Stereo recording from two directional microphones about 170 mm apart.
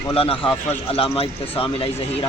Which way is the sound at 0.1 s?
35° left (ahead or behind).